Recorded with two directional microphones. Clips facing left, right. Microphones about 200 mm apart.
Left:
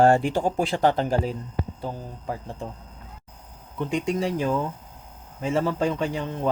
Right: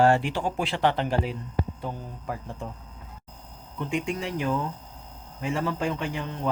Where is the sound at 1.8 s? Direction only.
30° left (ahead or behind).